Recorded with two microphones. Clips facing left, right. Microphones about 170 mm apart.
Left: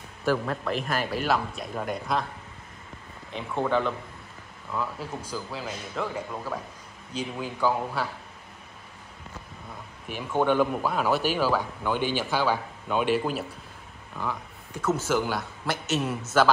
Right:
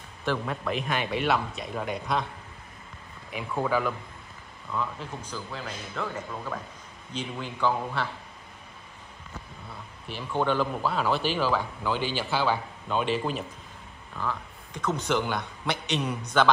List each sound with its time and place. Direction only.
0.2 s a man's voice: 5° left (ahead or behind)
3.6 s a man's voice: 5° right (ahead or behind)
4.7 s speech: 10° left (ahead or behind)
10.0 s speech: 10° left (ahead or behind)
12.0 s a man's voice: 50° left (ahead or behind)
12.3 s a man's voice: 10° left (ahead or behind)